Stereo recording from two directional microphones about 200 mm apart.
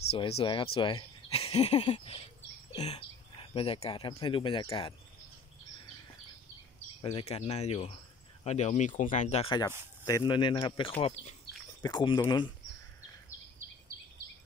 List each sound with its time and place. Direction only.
0.1 s speech: 30° left (ahead or behind)
7.0 s speech: 30° left (ahead or behind)